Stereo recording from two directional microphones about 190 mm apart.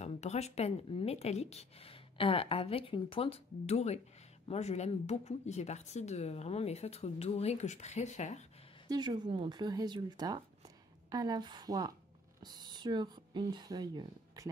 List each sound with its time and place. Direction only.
0.0 s a woman's voice: 35° left (ahead or behind)
8.8 s speech: 20° right (ahead or behind)